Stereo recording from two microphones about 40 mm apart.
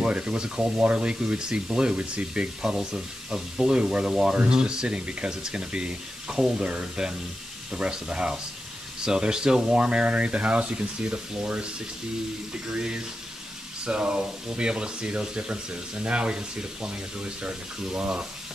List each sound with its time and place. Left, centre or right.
0.0 s speech: right
12.7 s speech: right